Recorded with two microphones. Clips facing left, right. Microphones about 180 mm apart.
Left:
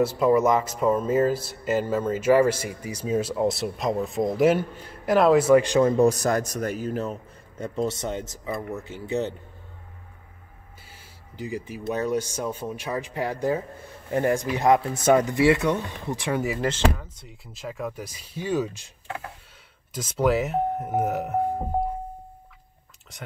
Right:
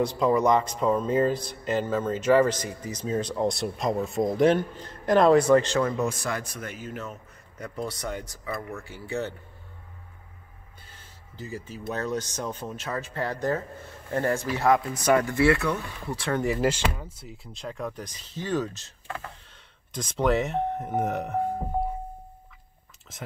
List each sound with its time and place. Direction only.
0.0 s speech: 5° left (ahead or behind)
5.9 s a man's voice: 35° left (ahead or behind); by 9.3 s 20° left (ahead or behind)
10.9 s speech: 10° left (ahead or behind)
17.0 s speech: 5° right (ahead or behind)
23.1 s speech: centre (ahead or behind)